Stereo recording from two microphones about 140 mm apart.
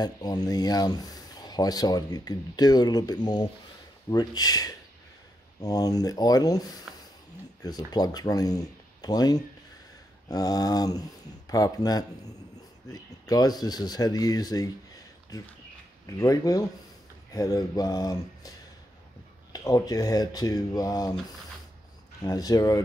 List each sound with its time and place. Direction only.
0.0 s speech: 30° left (ahead or behind)
16.1 s speech: 25° left (ahead or behind)
19.5 s speech: 25° left (ahead or behind)
22.2 s speech: 25° left (ahead or behind)